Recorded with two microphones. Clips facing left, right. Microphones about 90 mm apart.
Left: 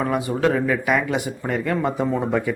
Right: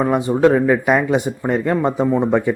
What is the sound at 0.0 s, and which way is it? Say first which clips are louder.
Speech: right 6 dB; 25° right (ahead or behind).